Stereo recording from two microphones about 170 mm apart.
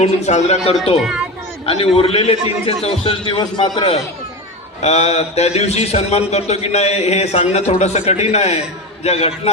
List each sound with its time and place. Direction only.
0.0 s a man's voice: 40° left (ahead or behind)
4.8 s a man's voice: 40° left (ahead or behind)